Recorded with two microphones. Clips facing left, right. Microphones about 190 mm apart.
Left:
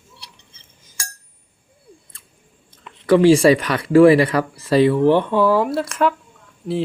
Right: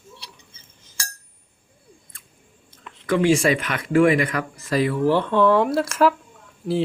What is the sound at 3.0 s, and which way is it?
Speech, 35° left (ahead or behind).